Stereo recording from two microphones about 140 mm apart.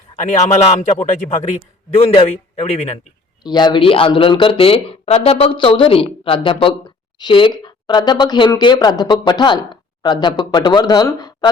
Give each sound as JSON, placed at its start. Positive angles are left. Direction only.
{"t": 0.2, "sound": "a man's voice", "side_deg": 60}
{"t": 3.4, "sound": "speech", "side_deg": 30}